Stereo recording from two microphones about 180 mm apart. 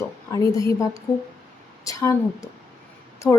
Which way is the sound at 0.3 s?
20° left (ahead or behind).